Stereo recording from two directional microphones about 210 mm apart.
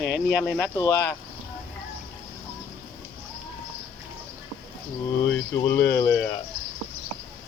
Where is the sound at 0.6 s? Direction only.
15° left (ahead or behind).